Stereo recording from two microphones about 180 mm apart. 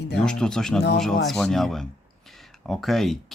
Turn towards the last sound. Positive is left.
turn(degrees=0)  # may be behind; listen again after turning